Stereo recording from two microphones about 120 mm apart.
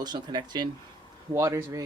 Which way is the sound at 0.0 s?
35° right (ahead or behind).